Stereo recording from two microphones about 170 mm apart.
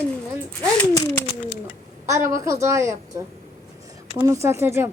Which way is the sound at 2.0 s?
15° right (ahead or behind).